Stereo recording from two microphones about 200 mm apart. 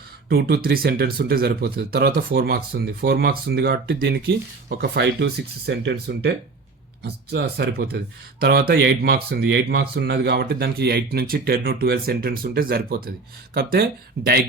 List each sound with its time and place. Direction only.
0.3 s speech: 50° right (ahead or behind)